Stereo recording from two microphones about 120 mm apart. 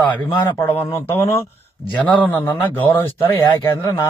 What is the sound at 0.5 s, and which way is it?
Speech, 20° left (ahead or behind).